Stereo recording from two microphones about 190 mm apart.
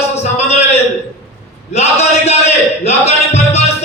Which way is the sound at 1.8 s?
35° left (ahead or behind).